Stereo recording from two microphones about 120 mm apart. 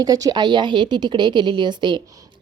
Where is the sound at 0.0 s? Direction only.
35° right (ahead or behind).